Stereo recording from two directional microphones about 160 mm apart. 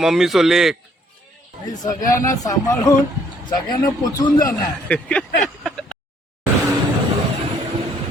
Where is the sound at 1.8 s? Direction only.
20° left (ahead or behind).